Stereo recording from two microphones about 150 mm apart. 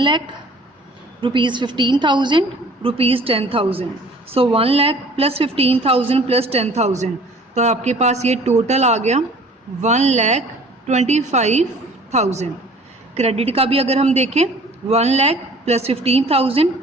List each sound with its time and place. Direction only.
1.2 s a woman's voice: 35° right (ahead or behind)